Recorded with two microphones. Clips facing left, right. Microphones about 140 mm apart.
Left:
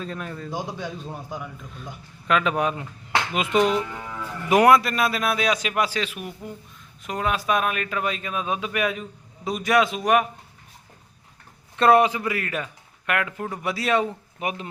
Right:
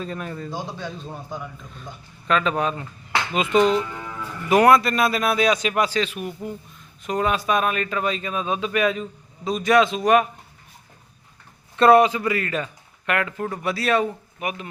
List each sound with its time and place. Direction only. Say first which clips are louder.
0.0 s a man's voice: right 2 dB; 5° right (ahead or behind)
0.5 s a man's voice: left 1 dB; 15° left (ahead or behind)
11.8 s speech: right 3 dB; 15° left (ahead or behind)
14.3 s speech: even; 30° left (ahead or behind)